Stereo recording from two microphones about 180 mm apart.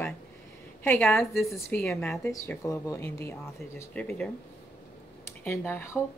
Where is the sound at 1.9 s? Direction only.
15° left (ahead or behind).